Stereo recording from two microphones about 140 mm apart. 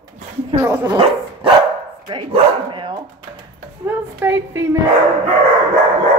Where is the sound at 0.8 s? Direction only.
35° right (ahead or behind).